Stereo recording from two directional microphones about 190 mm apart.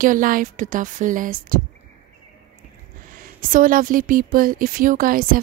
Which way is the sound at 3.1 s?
45° right (ahead or behind).